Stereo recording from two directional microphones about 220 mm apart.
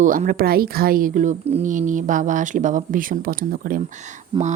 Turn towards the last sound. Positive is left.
turn(degrees=-20)  # may be behind; listen again after turning